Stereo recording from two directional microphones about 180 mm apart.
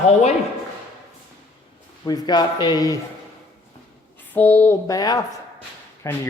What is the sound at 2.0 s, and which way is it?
Speech, 20° left (ahead or behind).